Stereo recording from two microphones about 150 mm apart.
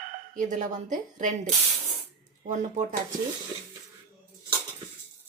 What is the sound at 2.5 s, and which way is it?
Speech, 55° right (ahead or behind).